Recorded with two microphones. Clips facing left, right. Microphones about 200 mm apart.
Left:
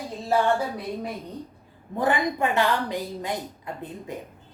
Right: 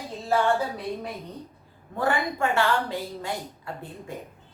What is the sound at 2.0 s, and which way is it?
A woman's voice, 20° left (ahead or behind).